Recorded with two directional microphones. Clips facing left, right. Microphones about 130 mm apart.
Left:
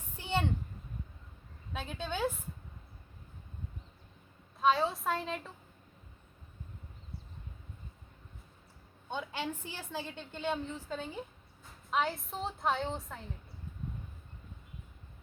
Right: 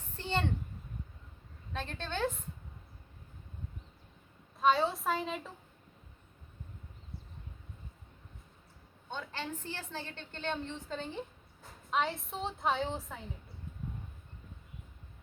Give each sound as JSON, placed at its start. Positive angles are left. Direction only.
{"t": 0.2, "sound": "a sound", "side_deg": 10}
{"t": 1.7, "sound": "a woman's voice", "side_deg": 10}
{"t": 4.6, "sound": "a woman's voice", "side_deg": 0}
{"t": 9.0, "sound": "a woman's voice", "side_deg": 15}